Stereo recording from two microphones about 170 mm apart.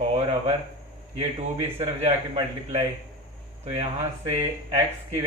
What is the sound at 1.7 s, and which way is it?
Speech, 40° right (ahead or behind).